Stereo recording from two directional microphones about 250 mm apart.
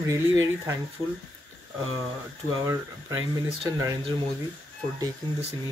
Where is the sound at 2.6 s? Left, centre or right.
Centre.